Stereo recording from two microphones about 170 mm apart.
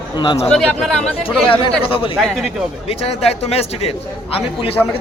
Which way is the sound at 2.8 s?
35° left (ahead or behind).